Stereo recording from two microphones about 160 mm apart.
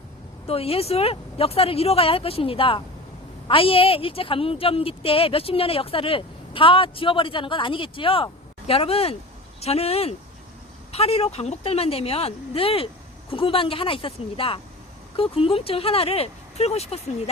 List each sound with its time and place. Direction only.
0.4 s a woman's voice: 35° left (ahead or behind)